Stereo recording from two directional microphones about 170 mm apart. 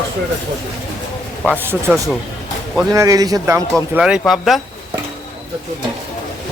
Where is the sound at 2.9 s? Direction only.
20° right (ahead or behind).